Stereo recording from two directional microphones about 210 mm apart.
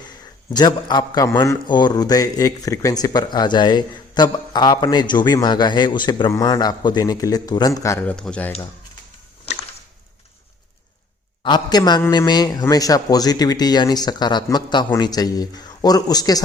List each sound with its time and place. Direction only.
0.5 s a man's voice: 20° left (ahead or behind)
11.4 s a man's voice: 20° left (ahead or behind)